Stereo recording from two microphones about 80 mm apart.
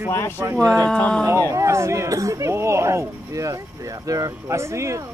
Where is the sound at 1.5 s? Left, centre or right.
Right.